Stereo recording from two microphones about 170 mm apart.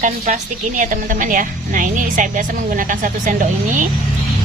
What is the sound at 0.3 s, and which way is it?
A woman's voice, 45° right (ahead or behind).